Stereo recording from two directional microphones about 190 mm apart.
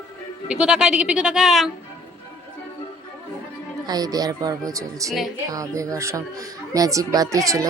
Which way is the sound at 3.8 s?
20° right (ahead or behind).